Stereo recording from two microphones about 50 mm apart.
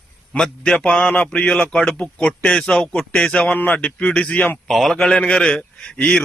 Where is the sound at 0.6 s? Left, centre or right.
Left.